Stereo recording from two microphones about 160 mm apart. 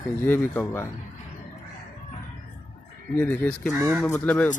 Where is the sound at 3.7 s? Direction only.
15° right (ahead or behind).